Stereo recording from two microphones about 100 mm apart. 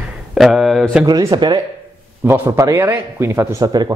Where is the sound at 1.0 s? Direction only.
45° right (ahead or behind).